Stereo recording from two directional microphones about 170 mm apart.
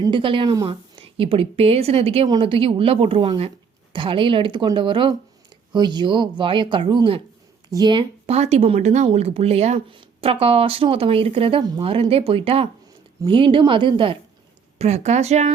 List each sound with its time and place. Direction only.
0.0 s speech: 30° right (ahead or behind)
14.8 s speech: 40° right (ahead or behind)